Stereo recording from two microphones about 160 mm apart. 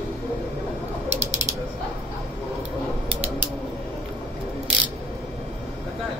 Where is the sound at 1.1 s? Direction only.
45° right (ahead or behind).